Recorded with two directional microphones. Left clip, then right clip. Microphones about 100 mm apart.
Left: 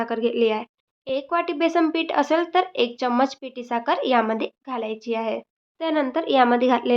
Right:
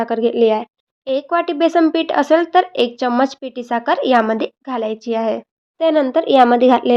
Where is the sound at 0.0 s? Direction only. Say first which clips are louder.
Right 7 dB; 45° right (ahead or behind).